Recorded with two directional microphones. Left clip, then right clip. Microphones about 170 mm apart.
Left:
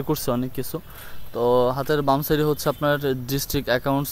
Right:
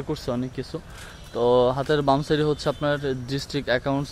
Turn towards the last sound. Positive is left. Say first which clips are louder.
# left 2 dB
turn(degrees=20)  # may be behind; listen again after turning